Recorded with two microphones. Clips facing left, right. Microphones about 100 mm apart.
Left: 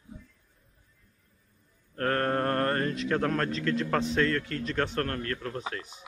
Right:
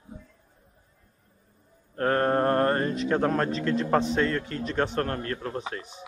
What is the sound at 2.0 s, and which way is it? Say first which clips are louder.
A man's voice: right 4 dB; 20° right (ahead or behind).